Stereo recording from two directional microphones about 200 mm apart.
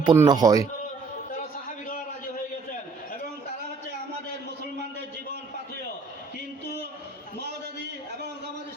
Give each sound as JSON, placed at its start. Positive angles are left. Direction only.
{"t": 0.0, "sound": "speech", "side_deg": -20}